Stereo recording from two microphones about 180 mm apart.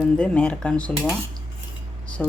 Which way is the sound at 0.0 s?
5° left (ahead or behind).